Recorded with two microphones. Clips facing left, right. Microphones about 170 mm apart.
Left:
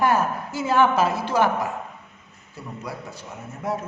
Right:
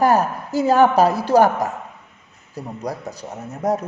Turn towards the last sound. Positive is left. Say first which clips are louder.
# right 7 dB
turn(degrees=-40)  # may be behind; listen again after turning